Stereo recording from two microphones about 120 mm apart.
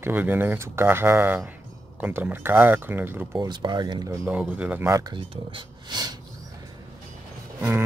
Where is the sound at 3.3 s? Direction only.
35° right (ahead or behind).